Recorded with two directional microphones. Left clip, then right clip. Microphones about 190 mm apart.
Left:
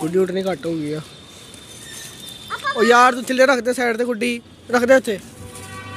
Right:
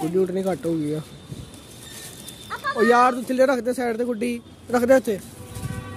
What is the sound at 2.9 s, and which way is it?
Speech, 5° right (ahead or behind).